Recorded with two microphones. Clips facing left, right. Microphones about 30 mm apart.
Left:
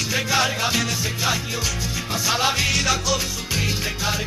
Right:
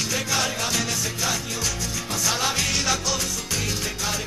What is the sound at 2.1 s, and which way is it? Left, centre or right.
Music, left.